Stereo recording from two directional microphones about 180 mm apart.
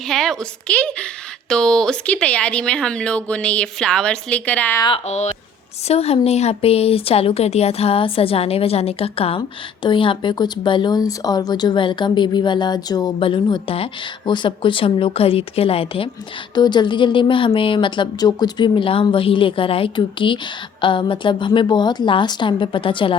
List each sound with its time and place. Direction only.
0.1 s a woman's voice: centre (ahead or behind)
5.0 s a woman's voice: 40° left (ahead or behind)